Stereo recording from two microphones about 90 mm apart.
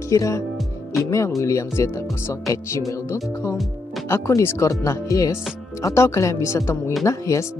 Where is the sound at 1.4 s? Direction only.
35° left (ahead or behind).